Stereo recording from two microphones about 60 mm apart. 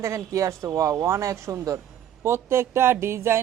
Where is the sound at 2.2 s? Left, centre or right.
Right.